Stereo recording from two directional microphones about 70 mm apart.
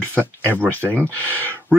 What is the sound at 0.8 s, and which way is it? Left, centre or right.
Speech, right.